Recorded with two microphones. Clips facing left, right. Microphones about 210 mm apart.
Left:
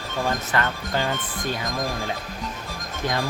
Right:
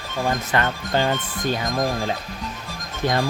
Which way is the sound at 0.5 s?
25° right (ahead or behind).